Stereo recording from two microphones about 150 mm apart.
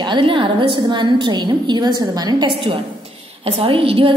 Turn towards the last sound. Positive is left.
turn(degrees=-35)  # may be behind; listen again after turning